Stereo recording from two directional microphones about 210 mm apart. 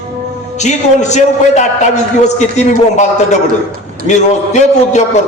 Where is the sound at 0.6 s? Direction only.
35° left (ahead or behind).